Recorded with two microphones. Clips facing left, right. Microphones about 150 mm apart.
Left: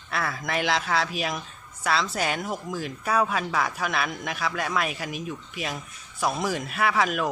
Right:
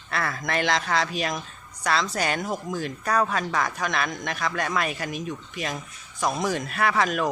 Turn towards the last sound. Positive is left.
turn(degrees=5)  # may be behind; listen again after turning